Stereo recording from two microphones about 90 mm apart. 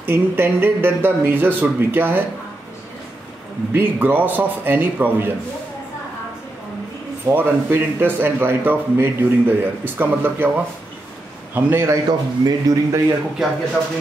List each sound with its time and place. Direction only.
0.0 s a man's voice: 25° right (ahead or behind)
3.7 s a man's voice: 20° right (ahead or behind)
7.2 s a man's voice: 25° right (ahead or behind)
11.9 s a man's voice: 45° right (ahead or behind)